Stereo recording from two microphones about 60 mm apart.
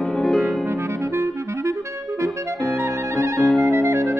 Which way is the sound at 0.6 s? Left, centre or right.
Right.